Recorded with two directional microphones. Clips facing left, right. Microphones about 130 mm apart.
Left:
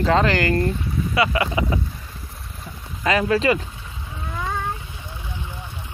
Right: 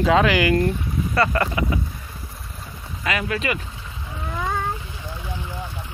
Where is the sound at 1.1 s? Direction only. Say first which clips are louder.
Even; 10° left (ahead or behind).